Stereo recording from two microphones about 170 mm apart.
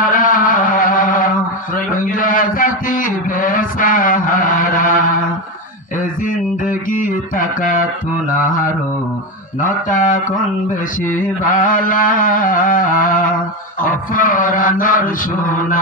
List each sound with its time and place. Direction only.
0.0 s a sound: 55° left (ahead or behind)
1.9 s a man's voice: 50° left (ahead or behind)
6.6 s mantra: 50° left (ahead or behind)
9.8 s mantra: 50° left (ahead or behind)
11.5 s mantra: 50° left (ahead or behind)